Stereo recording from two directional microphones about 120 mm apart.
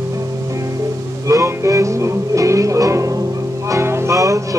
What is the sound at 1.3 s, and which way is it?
Music, 25° right (ahead or behind).